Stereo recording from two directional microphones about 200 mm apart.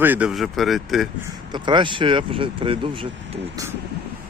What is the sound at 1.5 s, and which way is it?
Speech, 25° right (ahead or behind).